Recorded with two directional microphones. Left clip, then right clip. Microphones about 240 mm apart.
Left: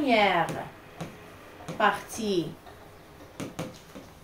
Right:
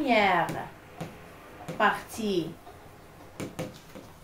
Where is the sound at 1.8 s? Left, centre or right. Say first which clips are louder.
Even; centre.